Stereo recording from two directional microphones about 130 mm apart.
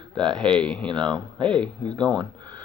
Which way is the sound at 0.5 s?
10° left (ahead or behind).